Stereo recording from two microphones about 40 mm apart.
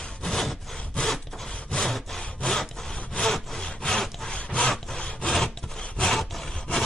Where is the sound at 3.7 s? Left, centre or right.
Left.